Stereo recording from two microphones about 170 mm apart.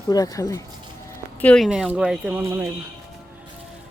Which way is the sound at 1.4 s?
5° left (ahead or behind).